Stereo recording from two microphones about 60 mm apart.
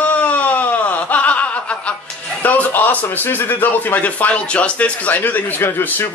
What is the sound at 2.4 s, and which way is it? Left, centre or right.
Music, left.